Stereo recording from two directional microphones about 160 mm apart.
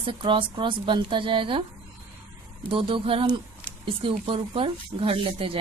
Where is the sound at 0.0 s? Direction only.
30° right (ahead or behind).